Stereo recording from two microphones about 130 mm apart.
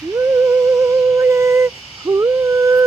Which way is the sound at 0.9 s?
20° right (ahead or behind).